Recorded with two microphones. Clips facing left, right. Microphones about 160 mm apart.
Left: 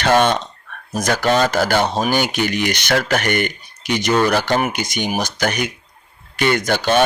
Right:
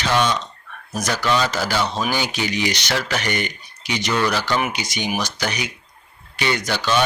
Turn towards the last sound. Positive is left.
turn(degrees=50)  # may be behind; listen again after turning